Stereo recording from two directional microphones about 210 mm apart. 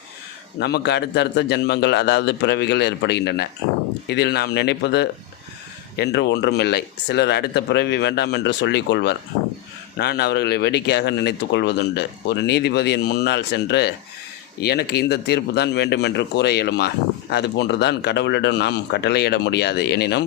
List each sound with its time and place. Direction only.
0.6 s speech: 55° left (ahead or behind)